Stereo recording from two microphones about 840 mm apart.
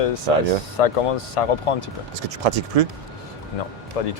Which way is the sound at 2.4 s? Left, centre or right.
Right.